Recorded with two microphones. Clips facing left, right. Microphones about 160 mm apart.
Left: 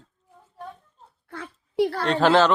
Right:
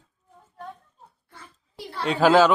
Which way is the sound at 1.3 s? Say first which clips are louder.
Left 14 dB; 75° left (ahead or behind).